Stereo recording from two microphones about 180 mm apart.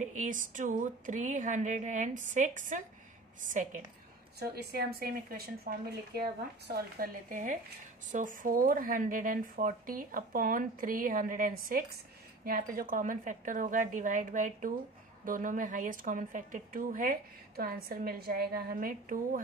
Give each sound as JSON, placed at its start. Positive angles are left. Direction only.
{"t": 0.0, "sound": "speech", "side_deg": -45}
{"t": 4.4, "sound": "speech", "side_deg": -65}